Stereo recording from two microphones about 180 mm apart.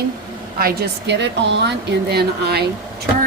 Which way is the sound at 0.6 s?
70° right (ahead or behind).